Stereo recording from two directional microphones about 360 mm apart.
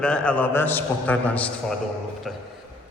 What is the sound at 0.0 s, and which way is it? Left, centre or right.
A man's voice, centre.